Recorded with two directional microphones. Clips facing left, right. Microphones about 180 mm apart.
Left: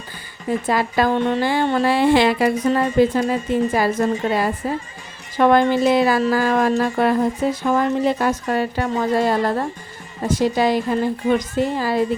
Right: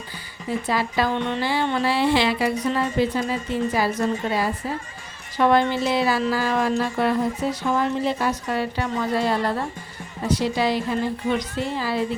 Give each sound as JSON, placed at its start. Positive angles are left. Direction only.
{"t": 0.4, "sound": "speech", "side_deg": 50}